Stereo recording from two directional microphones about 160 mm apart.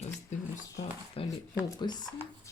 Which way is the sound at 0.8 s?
45° left (ahead or behind).